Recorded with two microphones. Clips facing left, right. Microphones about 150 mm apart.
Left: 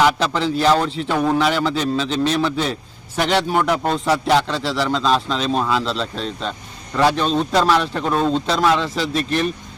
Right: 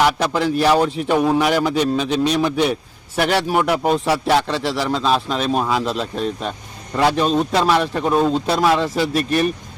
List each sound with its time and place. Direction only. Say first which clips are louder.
0.0 s a man's voice: even; 10° right (ahead or behind)